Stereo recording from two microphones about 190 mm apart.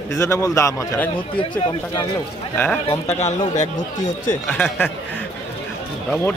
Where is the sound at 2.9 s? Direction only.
35° left (ahead or behind).